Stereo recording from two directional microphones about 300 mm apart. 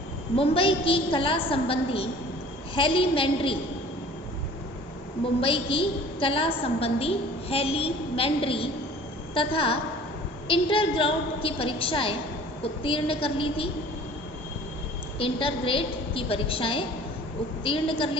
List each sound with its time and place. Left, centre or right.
0.3 s a woman's voice: centre
5.4 s a woman's voice: centre
15.2 s a woman's voice: centre